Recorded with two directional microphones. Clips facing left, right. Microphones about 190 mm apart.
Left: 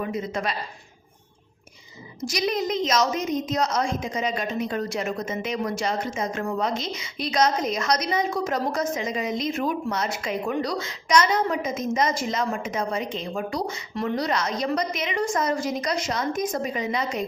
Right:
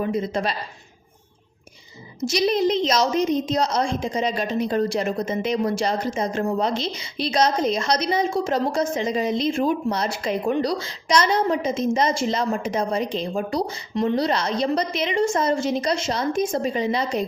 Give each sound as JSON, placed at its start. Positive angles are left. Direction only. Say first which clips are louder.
{"t": 0.0, "sound": "a woman's voice", "louder": "right 4 dB", "side_deg": -30}
{"t": 2.2, "sound": "a woman's voice", "louder": "right 5 dB", "side_deg": -30}